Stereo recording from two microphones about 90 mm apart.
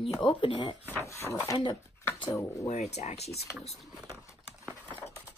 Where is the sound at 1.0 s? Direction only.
35° left (ahead or behind).